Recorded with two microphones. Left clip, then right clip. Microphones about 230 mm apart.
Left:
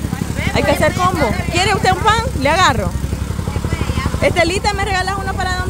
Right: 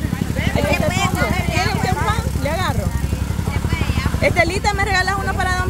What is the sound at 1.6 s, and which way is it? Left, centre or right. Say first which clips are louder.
Vehicle: left 9 dB; left.